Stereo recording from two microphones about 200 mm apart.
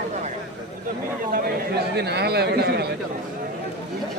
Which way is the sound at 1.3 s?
55° right (ahead or behind).